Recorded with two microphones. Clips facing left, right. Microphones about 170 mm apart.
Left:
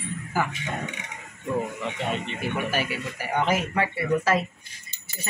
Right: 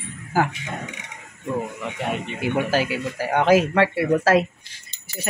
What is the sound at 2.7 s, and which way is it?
Speech, 90° right.